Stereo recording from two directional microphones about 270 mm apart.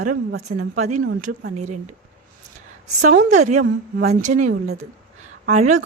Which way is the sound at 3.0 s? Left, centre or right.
Right.